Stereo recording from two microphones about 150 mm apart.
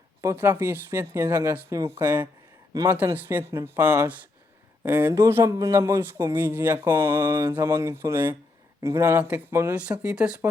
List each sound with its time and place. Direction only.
0.2 s speech: 15° right (ahead or behind)